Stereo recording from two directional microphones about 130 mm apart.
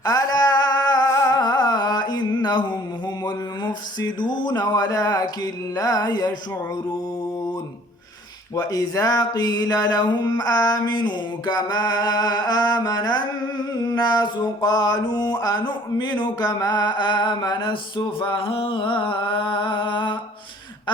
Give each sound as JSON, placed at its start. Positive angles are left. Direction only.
{"t": 0.0, "sound": "a sound", "side_deg": 30}
{"t": 3.2, "sound": "mantra", "side_deg": 35}
{"t": 8.5, "sound": "mantra", "side_deg": 30}